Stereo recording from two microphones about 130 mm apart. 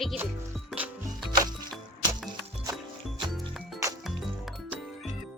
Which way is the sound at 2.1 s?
30° right (ahead or behind).